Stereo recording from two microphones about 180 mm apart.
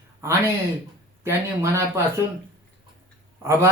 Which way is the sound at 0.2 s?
15° right (ahead or behind).